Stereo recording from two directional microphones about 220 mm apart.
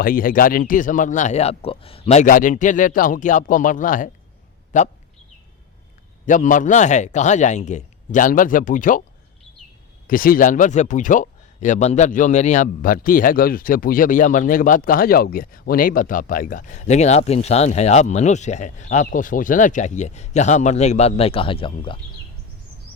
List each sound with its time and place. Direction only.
0.0 s speech: 40° left (ahead or behind)
6.2 s speech: 35° left (ahead or behind)
10.1 s speech: 40° left (ahead or behind); by 21.9 s 25° left (ahead or behind)